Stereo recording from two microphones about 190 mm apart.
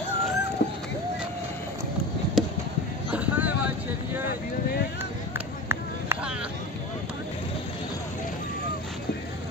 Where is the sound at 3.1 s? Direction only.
10° right (ahead or behind).